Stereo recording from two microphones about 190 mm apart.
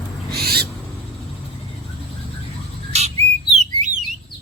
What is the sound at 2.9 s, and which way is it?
Whistle, 35° right (ahead or behind).